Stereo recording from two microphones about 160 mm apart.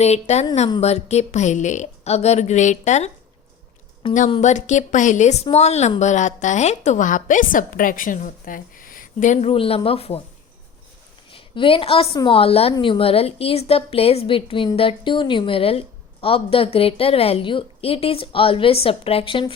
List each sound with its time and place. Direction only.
0.0 s speech: 40° left (ahead or behind)
4.0 s a woman's voice: 30° left (ahead or behind)
4.4 s speech: 50° left (ahead or behind)
11.3 s a woman's voice: 35° left (ahead or behind)